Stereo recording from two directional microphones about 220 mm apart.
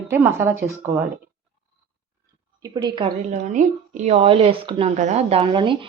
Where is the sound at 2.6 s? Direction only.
20° right (ahead or behind).